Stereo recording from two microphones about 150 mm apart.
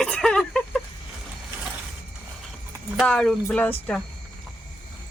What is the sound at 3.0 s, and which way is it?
Speech, 5° left (ahead or behind).